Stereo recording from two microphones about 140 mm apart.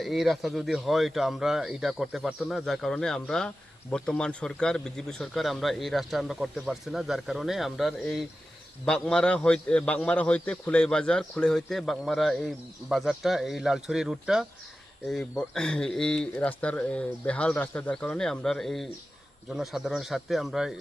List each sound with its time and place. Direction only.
0.0 s speech: centre (ahead or behind)